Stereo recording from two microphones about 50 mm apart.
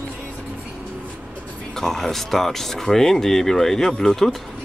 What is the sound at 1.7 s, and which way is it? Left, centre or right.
Speech, centre.